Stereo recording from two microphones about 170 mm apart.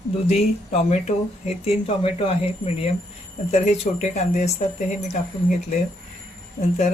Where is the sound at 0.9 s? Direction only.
40° left (ahead or behind).